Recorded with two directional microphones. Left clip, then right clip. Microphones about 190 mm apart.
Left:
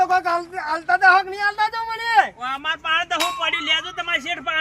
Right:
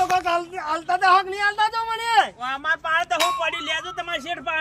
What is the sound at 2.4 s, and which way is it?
A woman's voice, 5° right (ahead or behind).